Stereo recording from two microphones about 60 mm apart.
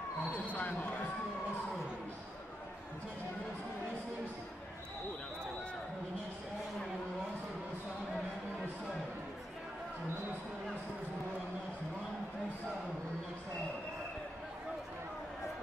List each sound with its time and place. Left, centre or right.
0.5 s speech: left